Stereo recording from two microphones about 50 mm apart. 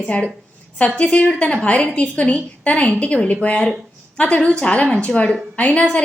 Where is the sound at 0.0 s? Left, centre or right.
Left.